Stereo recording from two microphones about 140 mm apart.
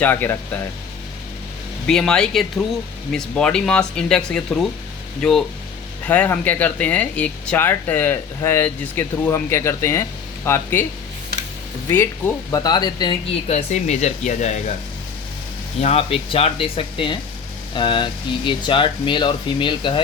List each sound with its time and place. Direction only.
0.0 s speech: 15° left (ahead or behind)
1.9 s speech: 5° left (ahead or behind)
11.9 s speech: 15° left (ahead or behind)
13.5 s speech: 55° left (ahead or behind)
15.8 s speech: 45° left (ahead or behind)